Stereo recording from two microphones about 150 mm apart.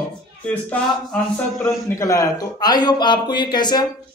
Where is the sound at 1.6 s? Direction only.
20° left (ahead or behind).